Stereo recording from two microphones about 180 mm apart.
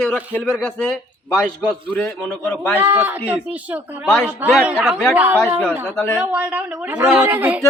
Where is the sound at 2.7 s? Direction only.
10° right (ahead or behind); by 6.2 s 5° left (ahead or behind).